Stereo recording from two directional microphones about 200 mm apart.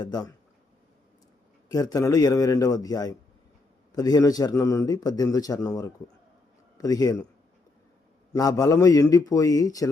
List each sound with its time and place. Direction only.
0.0 s speech: 20° left (ahead or behind)
1.7 s a man's voice: 20° left (ahead or behind)
8.3 s a man's voice: 20° left (ahead or behind)